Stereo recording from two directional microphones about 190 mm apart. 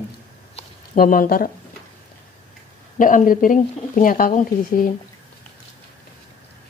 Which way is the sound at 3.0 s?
45° left (ahead or behind).